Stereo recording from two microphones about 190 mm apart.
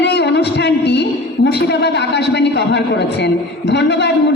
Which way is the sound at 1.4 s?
60° left (ahead or behind).